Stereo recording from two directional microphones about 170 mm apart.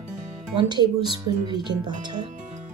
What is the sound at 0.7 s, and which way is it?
Speech, 25° right (ahead or behind).